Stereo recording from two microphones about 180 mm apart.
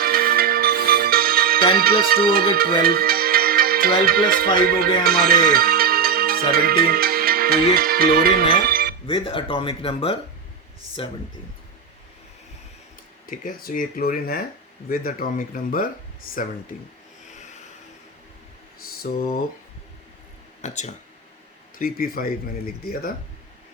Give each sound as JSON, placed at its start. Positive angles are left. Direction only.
{"t": 0.0, "sound": "music", "side_deg": -55}
{"t": 5.0, "sound": "speech", "side_deg": -55}
{"t": 9.0, "sound": "speech", "side_deg": 30}
{"t": 13.3, "sound": "speech", "side_deg": 50}
{"t": 20.6, "sound": "speech", "side_deg": 40}
{"t": 21.8, "sound": "speech", "side_deg": 55}